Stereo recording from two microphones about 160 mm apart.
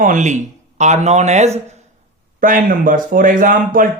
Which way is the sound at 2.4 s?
55° right (ahead or behind).